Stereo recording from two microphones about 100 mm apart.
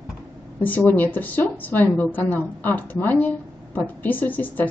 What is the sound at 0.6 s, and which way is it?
A woman's voice, 15° left (ahead or behind).